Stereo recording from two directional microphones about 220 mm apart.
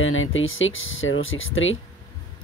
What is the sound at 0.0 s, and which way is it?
Speech, 65° left (ahead or behind).